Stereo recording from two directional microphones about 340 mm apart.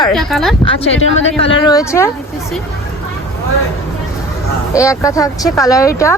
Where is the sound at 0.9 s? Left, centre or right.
Left.